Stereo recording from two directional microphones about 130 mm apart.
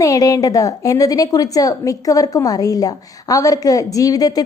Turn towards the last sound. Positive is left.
turn(degrees=30)  # may be behind; listen again after turning